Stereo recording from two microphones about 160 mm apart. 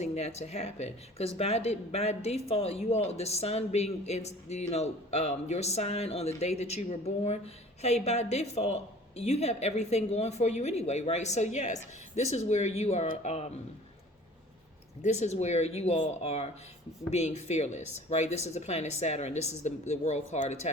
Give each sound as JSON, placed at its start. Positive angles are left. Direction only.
{"t": 0.0, "sound": "a woman's voice", "side_deg": 45}
{"t": 15.0, "sound": "speech", "side_deg": 45}